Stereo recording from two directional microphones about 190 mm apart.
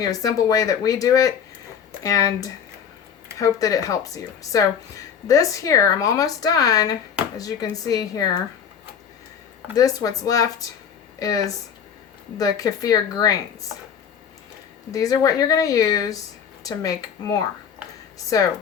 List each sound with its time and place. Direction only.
0.0 s speech: 20° left (ahead or behind)
9.7 s speech: 20° left (ahead or behind)
14.9 s speech: 20° left (ahead or behind)